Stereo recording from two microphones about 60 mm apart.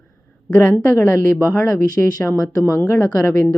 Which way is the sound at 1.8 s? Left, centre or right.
Left.